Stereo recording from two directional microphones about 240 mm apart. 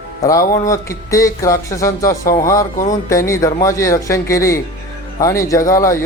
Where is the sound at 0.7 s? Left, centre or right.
Centre.